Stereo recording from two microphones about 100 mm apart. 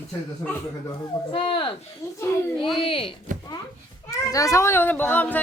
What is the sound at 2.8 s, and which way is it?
Speech, 60° left (ahead or behind).